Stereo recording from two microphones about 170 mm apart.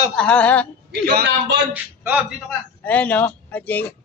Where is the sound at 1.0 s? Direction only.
75° right (ahead or behind).